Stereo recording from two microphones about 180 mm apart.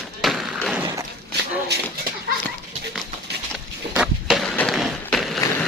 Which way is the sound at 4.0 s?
Centre (ahead or behind).